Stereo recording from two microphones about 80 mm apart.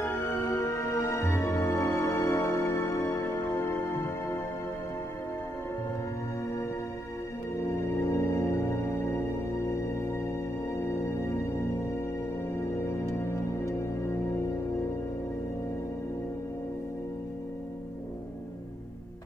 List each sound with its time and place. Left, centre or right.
0.0 s music: left
7.6 s music: left
12.8 s music: left